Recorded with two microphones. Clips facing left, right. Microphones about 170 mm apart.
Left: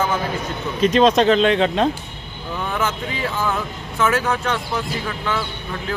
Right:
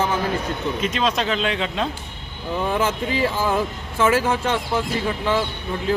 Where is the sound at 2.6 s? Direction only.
30° right (ahead or behind).